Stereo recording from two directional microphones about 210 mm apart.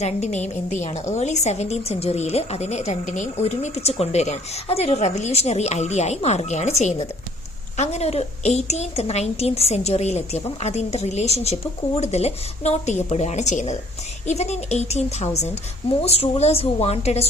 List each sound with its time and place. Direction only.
0.0 s a woman's voice: 35° left (ahead or behind)